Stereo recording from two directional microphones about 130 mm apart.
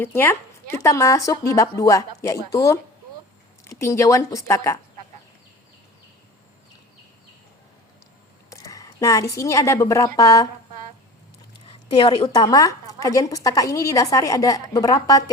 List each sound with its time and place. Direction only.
0.0 s a woman's voice: 15° left (ahead or behind)
8.4 s a woman's voice: 25° left (ahead or behind)
11.9 s a woman's voice: 40° left (ahead or behind)
12.3 s a woman's voice: 30° left (ahead or behind)